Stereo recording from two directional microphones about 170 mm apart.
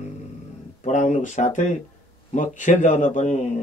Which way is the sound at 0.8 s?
45° left (ahead or behind).